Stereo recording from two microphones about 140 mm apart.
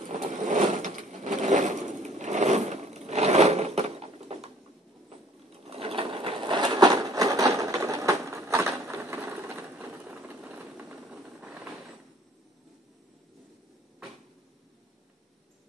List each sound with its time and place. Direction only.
0.3 s sewing machine: 60° right (ahead or behind)
5.7 s sewing machine: 45° right (ahead or behind); by 11.5 s 5° right (ahead or behind)